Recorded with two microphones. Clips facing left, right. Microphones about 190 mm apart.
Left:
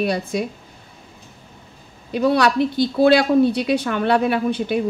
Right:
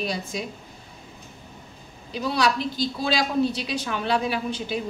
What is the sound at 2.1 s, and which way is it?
Speech, 60° left (ahead or behind).